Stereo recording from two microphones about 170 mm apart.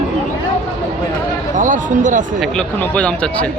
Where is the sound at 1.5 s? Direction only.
50° right (ahead or behind).